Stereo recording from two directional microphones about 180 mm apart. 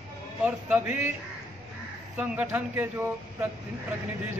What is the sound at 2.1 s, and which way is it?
Speech, 10° right (ahead or behind).